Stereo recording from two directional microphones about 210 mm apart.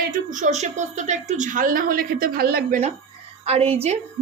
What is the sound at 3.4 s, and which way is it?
Speech, 30° right (ahead or behind).